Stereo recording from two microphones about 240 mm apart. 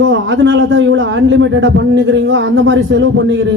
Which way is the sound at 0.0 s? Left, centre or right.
Right.